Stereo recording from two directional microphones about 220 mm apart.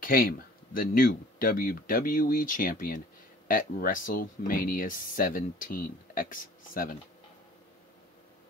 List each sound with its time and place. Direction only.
0.0 s speech: 40° left (ahead or behind)